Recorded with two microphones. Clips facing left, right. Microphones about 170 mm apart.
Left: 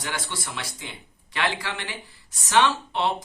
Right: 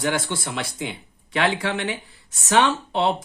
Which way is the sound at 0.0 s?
60° right (ahead or behind).